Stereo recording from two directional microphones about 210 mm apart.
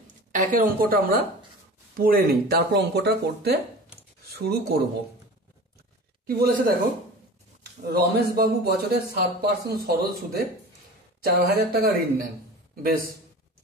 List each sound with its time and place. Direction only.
0.3 s a woman's voice: 40° right (ahead or behind)
6.2 s a man's voice: 45° right (ahead or behind)
7.9 s a man's voice: 45° right (ahead or behind)